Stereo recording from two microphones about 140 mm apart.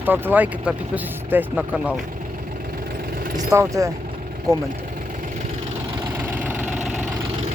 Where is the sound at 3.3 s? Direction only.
20° right (ahead or behind).